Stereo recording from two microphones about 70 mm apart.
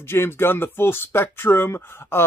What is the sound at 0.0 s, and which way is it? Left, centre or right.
Speech, left.